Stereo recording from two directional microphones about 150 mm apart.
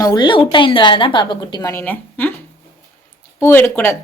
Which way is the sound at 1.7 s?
15° left (ahead or behind).